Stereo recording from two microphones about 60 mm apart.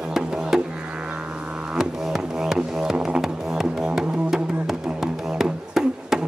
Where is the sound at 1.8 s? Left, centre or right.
Centre.